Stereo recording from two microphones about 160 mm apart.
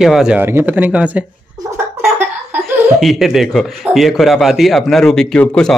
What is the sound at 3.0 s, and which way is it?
Speech, centre (ahead or behind).